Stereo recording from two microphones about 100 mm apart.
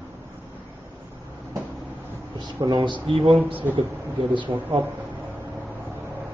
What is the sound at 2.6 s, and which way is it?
Speech, 45° right (ahead or behind).